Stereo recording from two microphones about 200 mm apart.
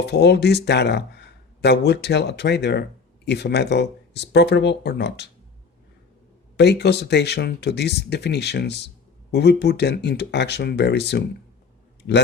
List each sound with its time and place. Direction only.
0.0 s speech: 55° left (ahead or behind)
6.6 s speech: 55° left (ahead or behind)